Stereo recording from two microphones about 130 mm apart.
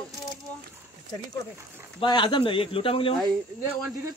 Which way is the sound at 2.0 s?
40° left (ahead or behind).